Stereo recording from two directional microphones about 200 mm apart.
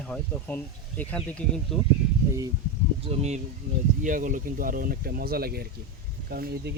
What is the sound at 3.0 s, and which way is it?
Speech, 30° right (ahead or behind).